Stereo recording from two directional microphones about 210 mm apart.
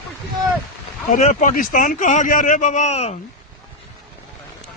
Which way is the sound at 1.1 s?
35° left (ahead or behind).